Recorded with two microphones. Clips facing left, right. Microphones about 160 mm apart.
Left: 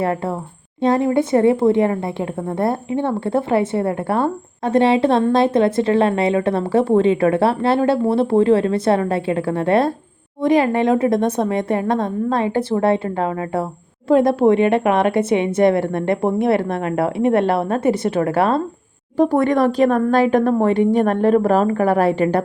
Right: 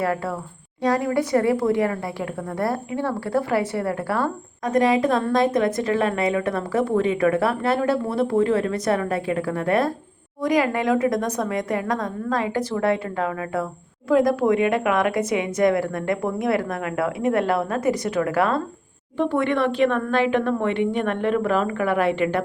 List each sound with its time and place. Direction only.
0.0 s a woman's voice: 25° left (ahead or behind)